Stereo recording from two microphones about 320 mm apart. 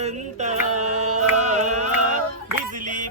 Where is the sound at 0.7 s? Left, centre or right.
Right.